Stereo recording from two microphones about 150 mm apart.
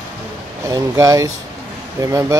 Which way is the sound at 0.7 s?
20° right (ahead or behind).